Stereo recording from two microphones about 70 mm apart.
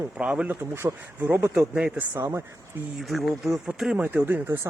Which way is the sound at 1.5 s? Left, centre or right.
Centre.